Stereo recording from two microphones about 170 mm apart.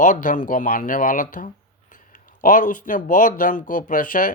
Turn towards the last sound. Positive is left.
turn(degrees=55)  # may be behind; listen again after turning